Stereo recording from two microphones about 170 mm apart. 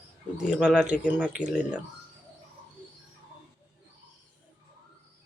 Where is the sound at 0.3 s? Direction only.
5° right (ahead or behind).